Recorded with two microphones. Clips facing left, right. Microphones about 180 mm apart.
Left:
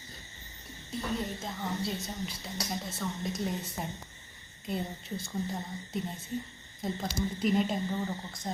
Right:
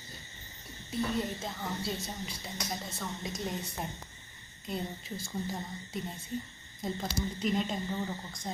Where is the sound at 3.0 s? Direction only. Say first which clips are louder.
Left 5 dB; centre (ahead or behind).